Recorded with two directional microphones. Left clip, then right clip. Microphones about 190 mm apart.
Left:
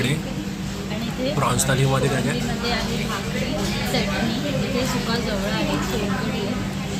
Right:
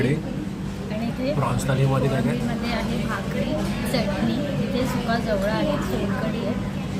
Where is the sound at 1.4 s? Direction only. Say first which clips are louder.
Left 3 dB; 5° left (ahead or behind).